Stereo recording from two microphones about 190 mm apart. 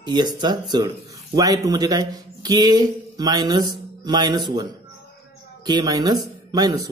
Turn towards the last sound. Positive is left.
turn(degrees=-20)  # may be behind; listen again after turning